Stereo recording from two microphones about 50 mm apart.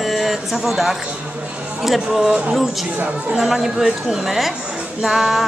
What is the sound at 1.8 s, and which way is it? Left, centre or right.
Speech, centre.